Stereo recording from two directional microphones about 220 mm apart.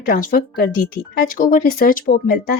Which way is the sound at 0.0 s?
40° left (ahead or behind).